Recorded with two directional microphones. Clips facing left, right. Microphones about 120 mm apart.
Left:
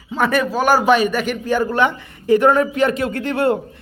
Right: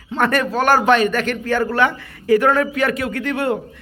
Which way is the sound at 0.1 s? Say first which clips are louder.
Even; 5° left (ahead or behind).